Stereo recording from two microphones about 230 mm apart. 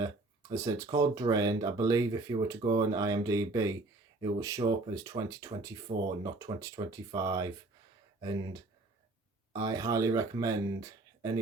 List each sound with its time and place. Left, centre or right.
0.0 s speech: centre
5.9 s speech: right
6.2 s speech: centre